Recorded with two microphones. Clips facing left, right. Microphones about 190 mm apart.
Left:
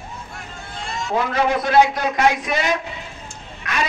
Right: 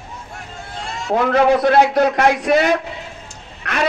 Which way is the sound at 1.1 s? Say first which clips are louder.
Right 6 dB; 60° right (ahead or behind).